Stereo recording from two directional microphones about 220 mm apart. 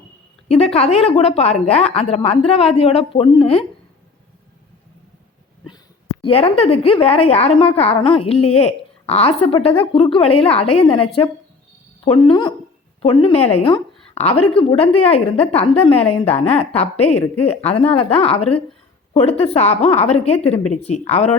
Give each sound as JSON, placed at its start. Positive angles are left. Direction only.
{"t": 0.4, "sound": "a woman's voice", "side_deg": 30}
{"t": 6.2, "sound": "a woman's voice", "side_deg": 25}